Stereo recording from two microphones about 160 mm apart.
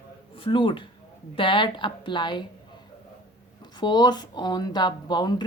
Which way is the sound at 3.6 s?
25° left (ahead or behind).